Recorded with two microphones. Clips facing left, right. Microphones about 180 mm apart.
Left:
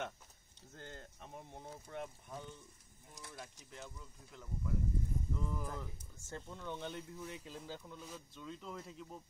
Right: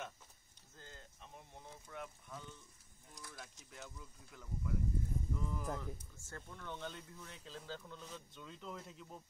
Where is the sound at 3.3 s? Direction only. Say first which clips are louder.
Left 4 dB; centre (ahead or behind).